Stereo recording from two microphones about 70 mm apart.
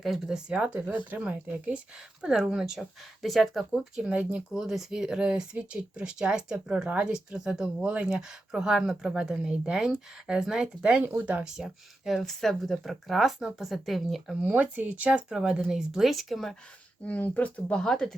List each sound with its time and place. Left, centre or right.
0.0 s speech: centre
0.3 s speech: centre
2.0 s speech: centre
4.1 s speech: centre
4.5 s speech: centre
11.0 s speech: right
11.4 s speech: centre
14.4 s speech: right; by 16.6 s centre
17.0 s speech: left